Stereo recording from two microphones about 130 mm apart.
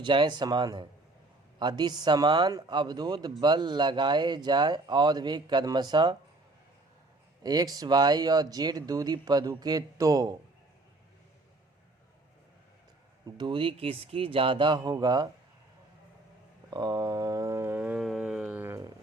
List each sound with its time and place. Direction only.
0.0 s speech: 40° right (ahead or behind)
7.4 s speech: 30° right (ahead or behind)
13.2 s speech: 35° right (ahead or behind)
16.6 s a sound: 30° right (ahead or behind); by 18.9 s 15° right (ahead or behind)